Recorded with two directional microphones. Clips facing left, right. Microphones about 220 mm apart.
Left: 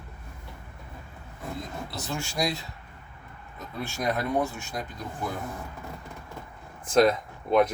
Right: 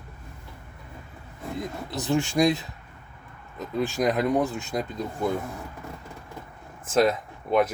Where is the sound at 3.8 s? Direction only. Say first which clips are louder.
Right 6 dB; 15° right (ahead or behind).